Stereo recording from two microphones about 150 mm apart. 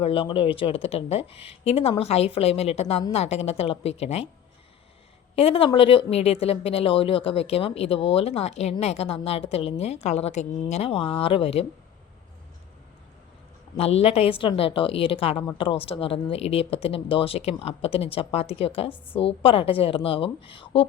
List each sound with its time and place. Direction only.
0.0 s a woman's voice: 40° left (ahead or behind)
5.4 s a woman's voice: 40° left (ahead or behind)
13.7 s speech: 45° left (ahead or behind)